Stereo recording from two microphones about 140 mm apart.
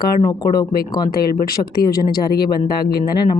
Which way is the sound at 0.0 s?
30° left (ahead or behind).